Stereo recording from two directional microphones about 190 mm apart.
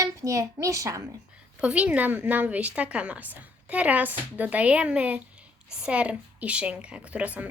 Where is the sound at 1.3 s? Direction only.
5° right (ahead or behind).